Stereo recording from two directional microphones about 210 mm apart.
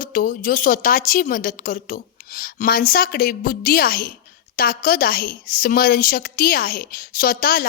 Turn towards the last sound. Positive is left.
turn(degrees=45)  # may be behind; listen again after turning